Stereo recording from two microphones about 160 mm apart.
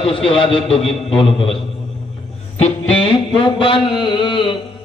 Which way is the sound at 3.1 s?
30° left (ahead or behind).